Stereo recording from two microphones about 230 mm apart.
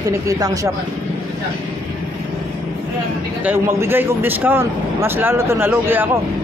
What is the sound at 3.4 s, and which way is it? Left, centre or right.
Speech, centre.